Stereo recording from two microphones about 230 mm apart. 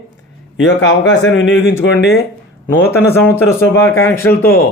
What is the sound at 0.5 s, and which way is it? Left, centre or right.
Speech, left.